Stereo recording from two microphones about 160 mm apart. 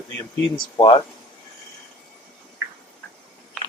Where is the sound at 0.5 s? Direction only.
30° left (ahead or behind).